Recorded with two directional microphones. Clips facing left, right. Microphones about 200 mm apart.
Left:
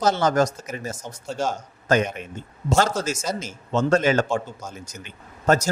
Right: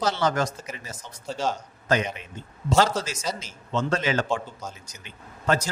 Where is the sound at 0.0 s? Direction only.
45° left (ahead or behind).